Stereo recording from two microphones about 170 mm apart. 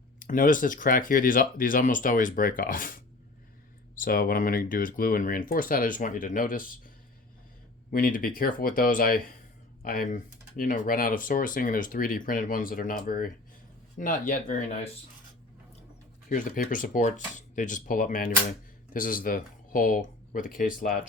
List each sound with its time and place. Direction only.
0.2 s speech: 50° left (ahead or behind)
3.9 s speech: 55° left (ahead or behind)
16.3 s speech: 50° left (ahead or behind)